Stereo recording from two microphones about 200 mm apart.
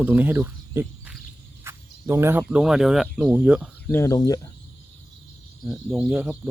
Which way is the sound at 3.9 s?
15° left (ahead or behind).